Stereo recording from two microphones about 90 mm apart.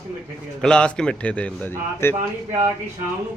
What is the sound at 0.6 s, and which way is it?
A man's voice, 10° left (ahead or behind).